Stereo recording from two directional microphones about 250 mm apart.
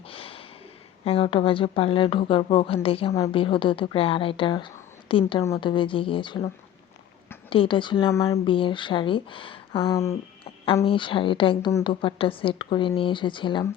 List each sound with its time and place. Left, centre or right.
0.1 s snort: left
1.0 s speech: left
7.5 s speech: left